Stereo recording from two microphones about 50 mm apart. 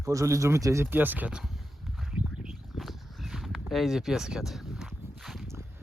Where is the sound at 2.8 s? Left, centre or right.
Centre.